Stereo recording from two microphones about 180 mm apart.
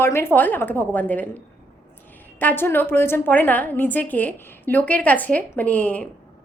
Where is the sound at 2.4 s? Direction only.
10° left (ahead or behind).